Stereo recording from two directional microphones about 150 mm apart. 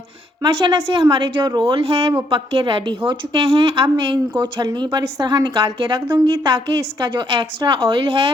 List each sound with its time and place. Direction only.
0.4 s a woman's voice: 30° right (ahead or behind)